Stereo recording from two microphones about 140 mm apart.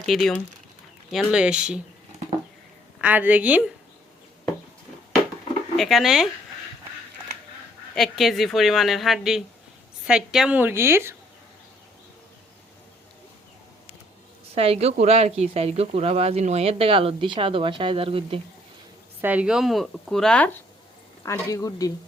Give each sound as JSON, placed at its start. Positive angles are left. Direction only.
{"t": 0.0, "sound": "a woman's voice", "side_deg": 0}
{"t": 3.0, "sound": "a woman's voice", "side_deg": -10}
{"t": 5.7, "sound": "a woman's voice", "side_deg": 0}
{"t": 7.9, "sound": "a woman's voice", "side_deg": 0}
{"t": 14.5, "sound": "speech", "side_deg": -45}
{"t": 19.2, "sound": "a woman's voice", "side_deg": -10}
{"t": 21.5, "sound": "speech", "side_deg": 25}